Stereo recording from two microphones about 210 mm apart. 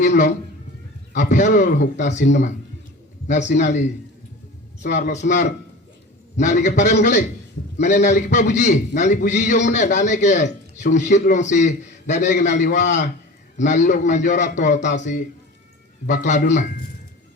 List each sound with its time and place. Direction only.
0.0 s a man's voice: 35° left (ahead or behind)
3.2 s a man's voice: 35° left (ahead or behind)